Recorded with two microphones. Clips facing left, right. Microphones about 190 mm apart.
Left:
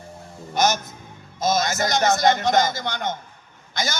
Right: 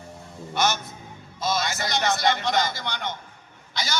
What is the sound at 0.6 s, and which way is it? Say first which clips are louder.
A man's voice: left 4 dB; 40° left (ahead or behind).